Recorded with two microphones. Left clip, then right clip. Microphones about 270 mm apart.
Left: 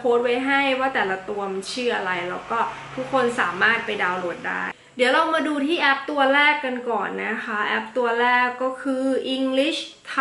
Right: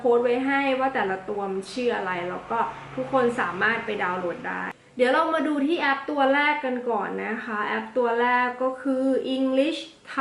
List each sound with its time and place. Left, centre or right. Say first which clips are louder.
0.1 s a woman's voice: left 2 dB; centre
1.3 s speech: left 1 dB; centre
1.7 s a woman's voice: left 3 dB; centre